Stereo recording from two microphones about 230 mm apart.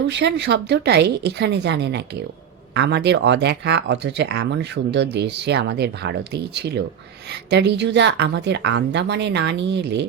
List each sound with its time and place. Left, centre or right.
0.1 s speech: right